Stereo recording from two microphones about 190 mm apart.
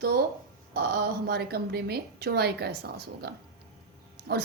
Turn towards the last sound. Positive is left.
turn(degrees=-55)  # may be behind; listen again after turning